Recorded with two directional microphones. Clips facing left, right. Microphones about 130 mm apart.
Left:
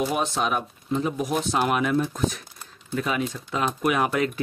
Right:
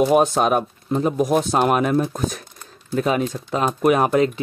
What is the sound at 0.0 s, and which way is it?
Speech, 50° right (ahead or behind).